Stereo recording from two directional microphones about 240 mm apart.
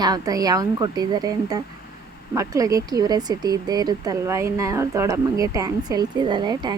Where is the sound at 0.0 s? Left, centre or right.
Centre.